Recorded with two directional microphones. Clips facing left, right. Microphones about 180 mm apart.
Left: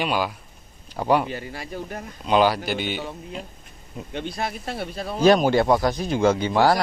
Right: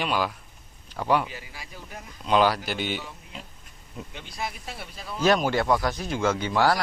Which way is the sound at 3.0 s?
60° left (ahead or behind).